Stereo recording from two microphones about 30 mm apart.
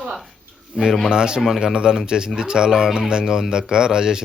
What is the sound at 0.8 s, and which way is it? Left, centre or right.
Speech, centre.